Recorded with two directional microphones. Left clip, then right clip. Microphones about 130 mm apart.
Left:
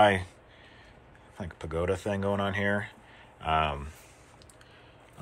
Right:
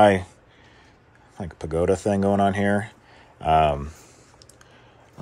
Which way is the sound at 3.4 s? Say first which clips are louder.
Right 9 dB; 80° right.